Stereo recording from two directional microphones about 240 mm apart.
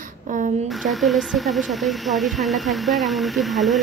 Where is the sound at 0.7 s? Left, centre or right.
Centre.